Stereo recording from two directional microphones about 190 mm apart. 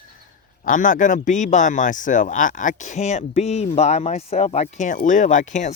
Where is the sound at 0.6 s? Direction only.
45° left (ahead or behind).